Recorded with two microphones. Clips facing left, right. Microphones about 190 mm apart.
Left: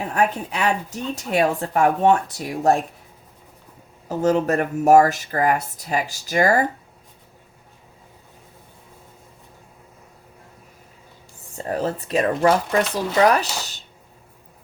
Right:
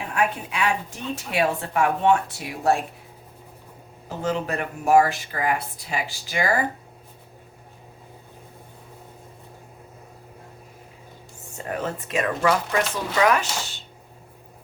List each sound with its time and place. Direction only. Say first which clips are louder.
0.1 s a woman's voice: left 2 dB; 40° left (ahead or behind)
4.2 s speech: left 7 dB; 45° left (ahead or behind)
11.5 s a woman's voice: left 4 dB; 35° left (ahead or behind)